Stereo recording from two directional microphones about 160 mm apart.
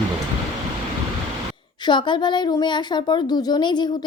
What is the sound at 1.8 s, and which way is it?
Speech, 30° left (ahead or behind).